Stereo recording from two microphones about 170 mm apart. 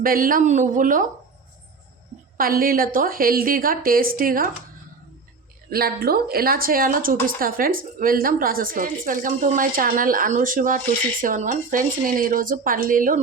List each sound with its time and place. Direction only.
0.0 s speech: 55° right (ahead or behind)
2.4 s speech: 60° right (ahead or behind)
5.7 s speech: 65° right (ahead or behind)